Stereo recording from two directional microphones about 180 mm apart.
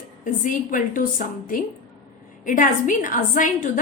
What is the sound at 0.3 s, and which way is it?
Speech, 45° left (ahead or behind).